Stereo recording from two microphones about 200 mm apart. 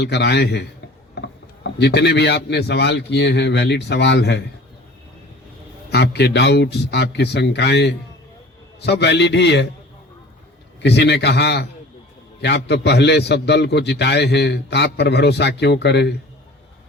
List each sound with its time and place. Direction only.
0.0 s a man's voice: 60° left (ahead or behind)
5.9 s a man's voice: 55° left (ahead or behind)
10.8 s a man's voice: 60° left (ahead or behind)